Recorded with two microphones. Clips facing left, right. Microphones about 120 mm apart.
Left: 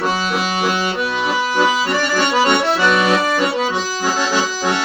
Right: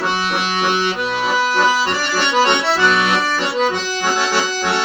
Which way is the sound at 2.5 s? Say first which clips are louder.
Left 1 dB; 50° left (ahead or behind).